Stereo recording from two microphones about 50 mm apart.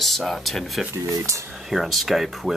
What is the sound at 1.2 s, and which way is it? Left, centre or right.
Speech, right.